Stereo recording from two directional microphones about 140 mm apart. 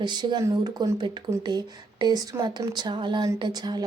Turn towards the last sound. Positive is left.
turn(degrees=-30)  # may be behind; listen again after turning